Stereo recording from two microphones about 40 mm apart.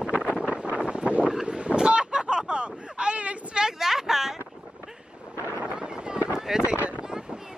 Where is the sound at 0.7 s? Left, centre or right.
Right.